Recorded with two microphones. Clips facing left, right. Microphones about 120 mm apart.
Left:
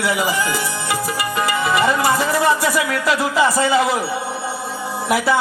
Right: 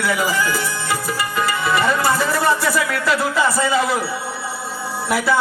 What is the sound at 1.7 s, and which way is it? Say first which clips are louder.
Speech: left 1 dB; 25° left (ahead or behind).